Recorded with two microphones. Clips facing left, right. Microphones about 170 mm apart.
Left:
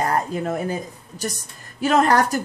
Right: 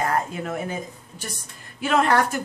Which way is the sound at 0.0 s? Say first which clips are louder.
Left 3 dB; 35° left (ahead or behind).